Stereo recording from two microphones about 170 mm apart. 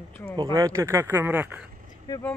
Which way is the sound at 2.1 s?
25° left (ahead or behind).